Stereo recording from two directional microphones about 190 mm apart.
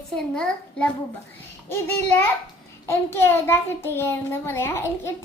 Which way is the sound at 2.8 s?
15° left (ahead or behind).